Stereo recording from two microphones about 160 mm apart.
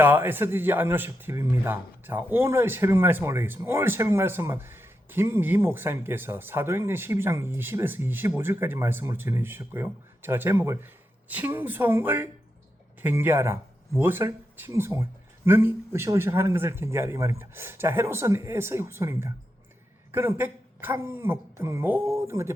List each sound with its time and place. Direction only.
0.0 s speech: 15° right (ahead or behind)